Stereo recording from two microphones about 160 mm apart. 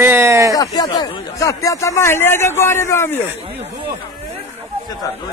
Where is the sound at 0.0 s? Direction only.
15° right (ahead or behind).